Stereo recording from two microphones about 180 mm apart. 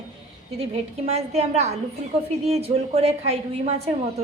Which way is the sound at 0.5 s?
35° right (ahead or behind).